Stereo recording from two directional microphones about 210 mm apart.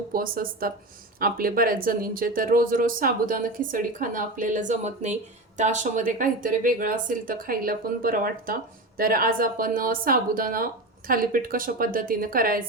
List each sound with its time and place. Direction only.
0.1 s speech: 45° right (ahead or behind)